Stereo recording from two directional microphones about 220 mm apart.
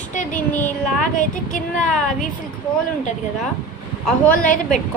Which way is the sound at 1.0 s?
35° left (ahead or behind).